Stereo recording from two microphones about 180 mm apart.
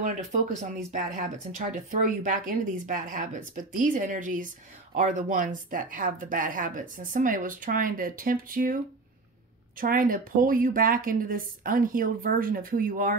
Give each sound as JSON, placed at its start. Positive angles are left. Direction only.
{"t": 0.0, "sound": "speech", "side_deg": -40}
{"t": 9.8, "sound": "speech", "side_deg": -50}